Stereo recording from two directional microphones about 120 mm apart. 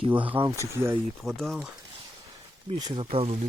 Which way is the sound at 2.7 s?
40° right (ahead or behind).